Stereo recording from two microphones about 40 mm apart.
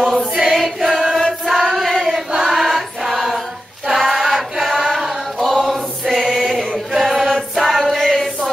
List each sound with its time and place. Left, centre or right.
0.4 s choir: centre
6.2 s chant: centre
7.5 s choir: centre